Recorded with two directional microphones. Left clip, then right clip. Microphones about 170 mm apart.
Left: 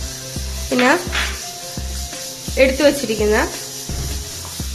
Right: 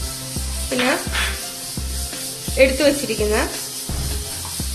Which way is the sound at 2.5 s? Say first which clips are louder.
Left 1 dB; 20° left (ahead or behind).